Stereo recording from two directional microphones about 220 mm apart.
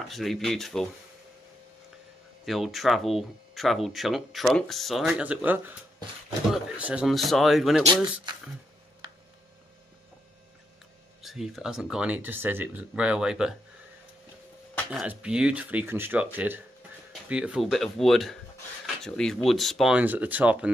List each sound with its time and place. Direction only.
0.1 s speech: centre (ahead or behind)
2.4 s speech: centre (ahead or behind)
7.8 s speech: 20° right (ahead or behind)
11.1 s speech: centre (ahead or behind)
14.9 s speech: 5° right (ahead or behind)